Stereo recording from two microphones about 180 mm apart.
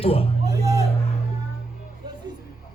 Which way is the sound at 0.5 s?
20° right (ahead or behind).